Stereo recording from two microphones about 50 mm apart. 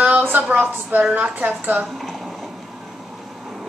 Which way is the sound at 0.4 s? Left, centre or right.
Right.